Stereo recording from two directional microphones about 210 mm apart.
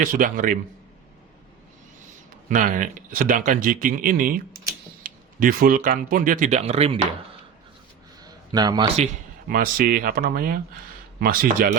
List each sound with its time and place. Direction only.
0.0 s speech: 40° right (ahead or behind)
2.5 s speech: 40° right (ahead or behind)
8.2 s a man's voice: 20° right (ahead or behind)
9.5 s speech: 45° right (ahead or behind)